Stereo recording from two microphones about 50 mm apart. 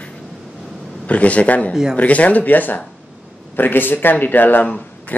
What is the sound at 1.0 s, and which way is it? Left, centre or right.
A man's voice, left.